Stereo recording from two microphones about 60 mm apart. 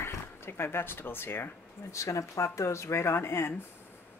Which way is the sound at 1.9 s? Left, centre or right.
Left.